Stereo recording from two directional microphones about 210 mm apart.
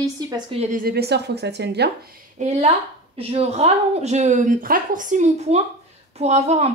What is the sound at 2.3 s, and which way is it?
Speech, 35° right (ahead or behind).